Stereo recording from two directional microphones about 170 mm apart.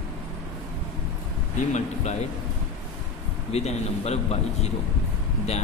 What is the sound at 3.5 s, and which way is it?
A man's voice, 40° left (ahead or behind).